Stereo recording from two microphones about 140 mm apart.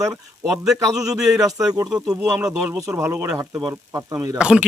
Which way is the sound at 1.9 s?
5° right (ahead or behind).